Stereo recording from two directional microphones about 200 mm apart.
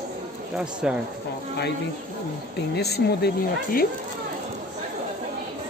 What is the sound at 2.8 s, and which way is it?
Speech, 55° left (ahead or behind).